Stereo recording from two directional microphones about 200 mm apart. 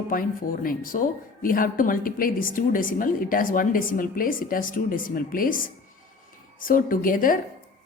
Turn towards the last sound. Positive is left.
turn(degrees=45)  # may be behind; listen again after turning